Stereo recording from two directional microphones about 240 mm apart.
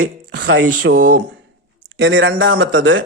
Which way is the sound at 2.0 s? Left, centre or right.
Right.